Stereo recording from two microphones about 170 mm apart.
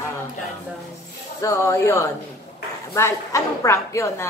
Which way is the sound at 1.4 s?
20° left (ahead or behind).